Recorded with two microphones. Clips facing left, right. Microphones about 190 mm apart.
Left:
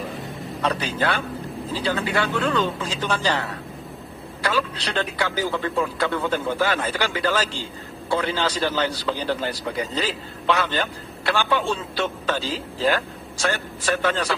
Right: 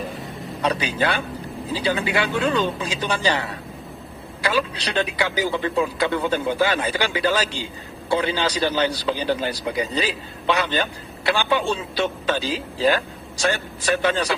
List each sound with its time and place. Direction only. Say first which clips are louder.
0.6 s a man's voice: right 2 dB; 15° right (ahead or behind)
4.4 s a man's voice: right 2 dB; 15° right (ahead or behind)